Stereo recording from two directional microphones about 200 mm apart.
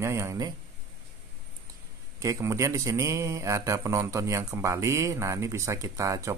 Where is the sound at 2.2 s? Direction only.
15° right (ahead or behind).